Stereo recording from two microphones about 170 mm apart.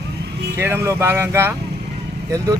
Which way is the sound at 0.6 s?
15° right (ahead or behind).